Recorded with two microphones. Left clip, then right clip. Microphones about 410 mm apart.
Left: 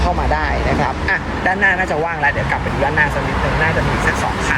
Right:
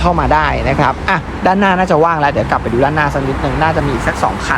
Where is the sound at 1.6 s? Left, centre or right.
Right.